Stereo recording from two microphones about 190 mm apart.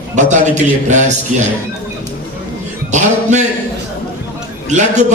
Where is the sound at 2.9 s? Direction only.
40° right (ahead or behind).